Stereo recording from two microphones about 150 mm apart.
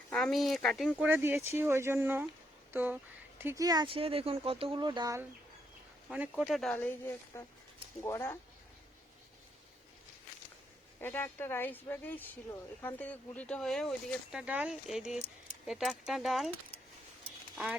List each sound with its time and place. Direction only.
0.1 s speech: centre (ahead or behind)
0.9 s speech: 10° right (ahead or behind); by 5.1 s 30° right (ahead or behind)
6.1 s speech: centre (ahead or behind); by 8.4 s 15° left (ahead or behind)
11.0 s speech: 15° left (ahead or behind); by 16.5 s centre (ahead or behind)
17.5 s speech: centre (ahead or behind)